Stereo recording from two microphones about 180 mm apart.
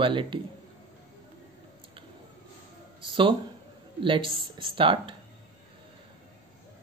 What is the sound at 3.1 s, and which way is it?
Speech, 30° right (ahead or behind).